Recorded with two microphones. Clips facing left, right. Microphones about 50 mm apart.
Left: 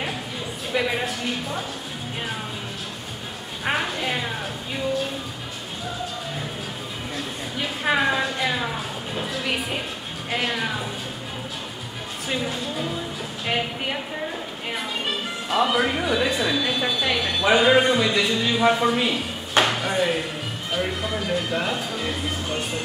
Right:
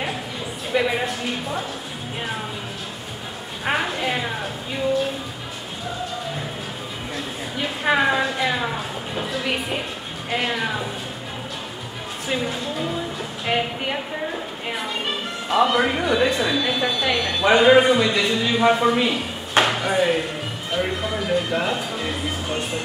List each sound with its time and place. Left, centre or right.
0.7 s speech: centre
3.6 s a woman's voice: centre
7.2 s a sound: centre
10.3 s speech: centre
12.3 s speech: centre